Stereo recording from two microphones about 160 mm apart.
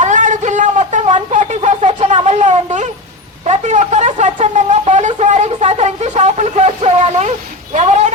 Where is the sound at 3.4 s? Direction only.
50° right (ahead or behind).